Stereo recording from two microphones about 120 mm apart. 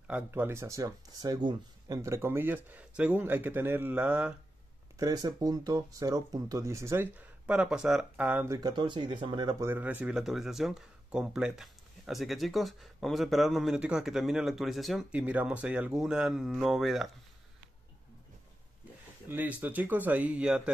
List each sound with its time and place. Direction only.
0.3 s speech: 20° right (ahead or behind); by 2.0 s 35° right (ahead or behind)
2.0 s speech: 25° right (ahead or behind)
4.9 s speech: 30° right (ahead or behind); by 8.5 s 10° right (ahead or behind)
8.5 s speech: 35° right (ahead or behind)
9.6 s speech: 15° right (ahead or behind)
19.2 s speech: 15° right (ahead or behind)